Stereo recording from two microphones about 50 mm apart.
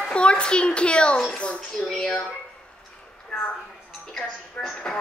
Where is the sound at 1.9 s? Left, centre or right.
Centre.